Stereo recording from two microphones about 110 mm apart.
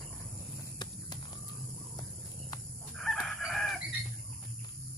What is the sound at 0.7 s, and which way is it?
Clip-clop, 40° left (ahead or behind).